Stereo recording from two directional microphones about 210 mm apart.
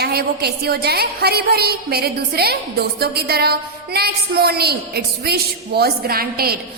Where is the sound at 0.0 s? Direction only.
50° right (ahead or behind).